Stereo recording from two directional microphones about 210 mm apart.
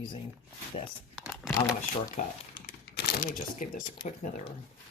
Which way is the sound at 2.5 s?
45° left (ahead or behind).